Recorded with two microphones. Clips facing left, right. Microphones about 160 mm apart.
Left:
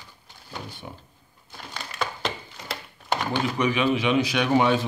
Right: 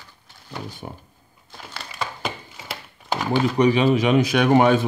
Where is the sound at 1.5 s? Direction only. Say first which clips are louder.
Even; centre (ahead or behind).